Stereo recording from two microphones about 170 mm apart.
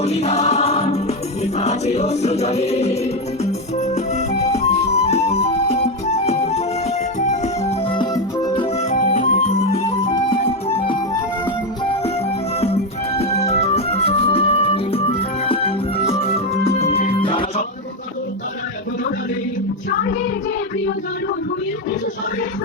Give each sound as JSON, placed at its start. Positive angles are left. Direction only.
{"t": 0.0, "sound": "music", "side_deg": 40}
{"t": 3.9, "sound": "music", "side_deg": 40}
{"t": 7.9, "sound": "music", "side_deg": 30}
{"t": 8.9, "sound": "music", "side_deg": 50}
{"t": 12.5, "sound": "music", "side_deg": 35}